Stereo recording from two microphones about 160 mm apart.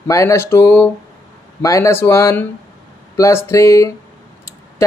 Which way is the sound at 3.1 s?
20° left (ahead or behind).